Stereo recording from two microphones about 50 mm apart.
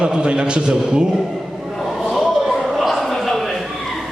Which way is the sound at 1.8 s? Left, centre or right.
Centre.